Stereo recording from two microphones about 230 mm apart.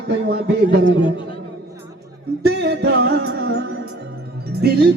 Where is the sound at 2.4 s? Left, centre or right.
Right.